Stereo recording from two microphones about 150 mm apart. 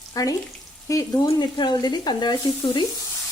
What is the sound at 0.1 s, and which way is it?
Frying, 25° left (ahead or behind).